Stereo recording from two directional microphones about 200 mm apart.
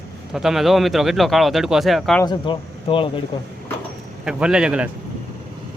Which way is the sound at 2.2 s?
25° left (ahead or behind).